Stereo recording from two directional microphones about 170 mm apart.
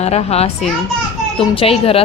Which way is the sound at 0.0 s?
40° left (ahead or behind).